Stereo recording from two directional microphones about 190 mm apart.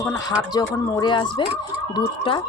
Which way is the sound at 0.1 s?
20° left (ahead or behind).